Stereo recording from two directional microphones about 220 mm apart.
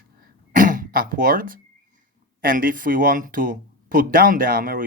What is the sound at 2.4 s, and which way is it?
Speech, 40° right (ahead or behind).